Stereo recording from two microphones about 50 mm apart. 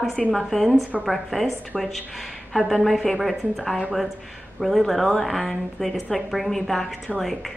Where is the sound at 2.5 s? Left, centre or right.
Centre.